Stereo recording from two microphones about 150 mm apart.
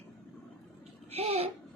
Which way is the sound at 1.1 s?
45° right (ahead or behind).